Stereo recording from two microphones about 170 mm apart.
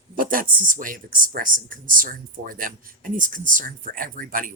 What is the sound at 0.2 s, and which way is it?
Speech, 55° right (ahead or behind).